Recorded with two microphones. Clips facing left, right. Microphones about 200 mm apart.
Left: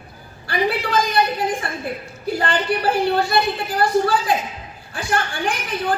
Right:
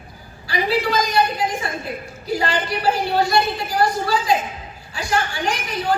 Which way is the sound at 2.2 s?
55° left (ahead or behind).